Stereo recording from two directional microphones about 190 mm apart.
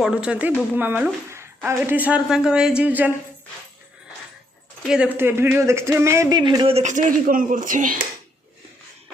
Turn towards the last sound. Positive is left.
turn(degrees=-45)  # may be behind; listen again after turning